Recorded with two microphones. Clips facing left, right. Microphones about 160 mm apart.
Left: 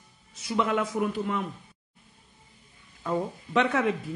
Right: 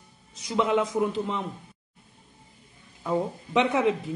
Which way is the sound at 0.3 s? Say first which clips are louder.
Right 2 dB; 20° right (ahead or behind).